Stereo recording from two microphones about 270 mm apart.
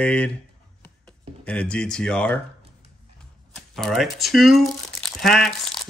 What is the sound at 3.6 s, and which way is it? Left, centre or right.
Speech, centre.